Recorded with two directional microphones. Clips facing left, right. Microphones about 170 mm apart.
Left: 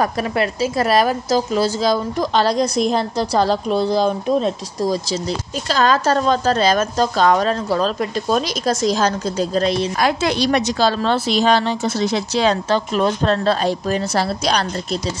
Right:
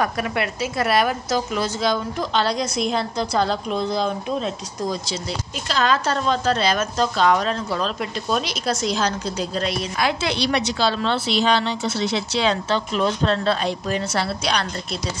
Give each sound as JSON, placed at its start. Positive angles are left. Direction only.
{"t": 0.0, "sound": "a woman's voice", "side_deg": 35}